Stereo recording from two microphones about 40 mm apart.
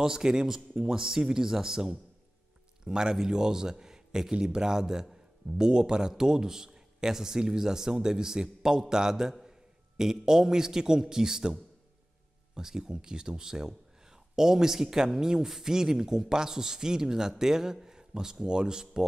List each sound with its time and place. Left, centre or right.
0.0 s a man's voice: centre
12.5 s a man's voice: centre